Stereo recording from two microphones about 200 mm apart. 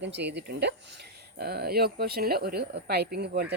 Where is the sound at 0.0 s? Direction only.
60° right (ahead or behind).